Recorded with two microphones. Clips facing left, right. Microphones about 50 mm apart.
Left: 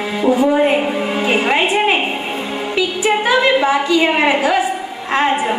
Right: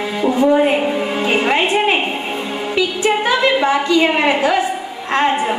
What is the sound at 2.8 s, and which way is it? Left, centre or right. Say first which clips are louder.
A woman's voice: even; centre.